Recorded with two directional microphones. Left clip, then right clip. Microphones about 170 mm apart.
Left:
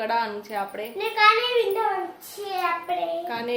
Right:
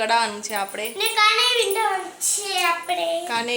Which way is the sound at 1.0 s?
10° left (ahead or behind).